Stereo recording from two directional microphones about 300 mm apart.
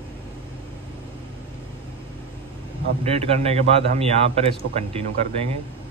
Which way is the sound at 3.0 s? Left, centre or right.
Centre.